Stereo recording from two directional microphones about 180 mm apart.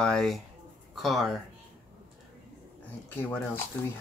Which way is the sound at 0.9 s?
Centre (ahead or behind).